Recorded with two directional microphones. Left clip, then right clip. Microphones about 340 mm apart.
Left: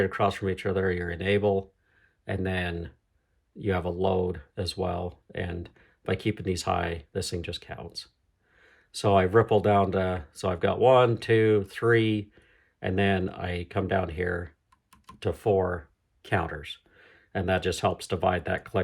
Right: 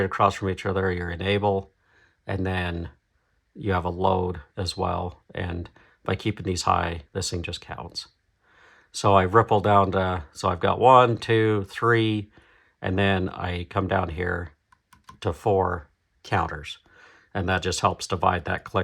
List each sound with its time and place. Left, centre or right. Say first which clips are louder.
0.0 s speech: right 4 dB; centre